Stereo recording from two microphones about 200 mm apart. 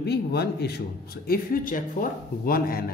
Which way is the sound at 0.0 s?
55° left (ahead or behind).